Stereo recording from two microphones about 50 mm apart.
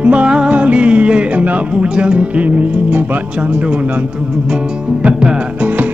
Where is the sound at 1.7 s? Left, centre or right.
Centre.